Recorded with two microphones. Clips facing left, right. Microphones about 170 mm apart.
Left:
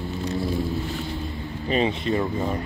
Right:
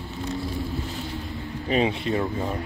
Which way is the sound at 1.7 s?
5° right (ahead or behind).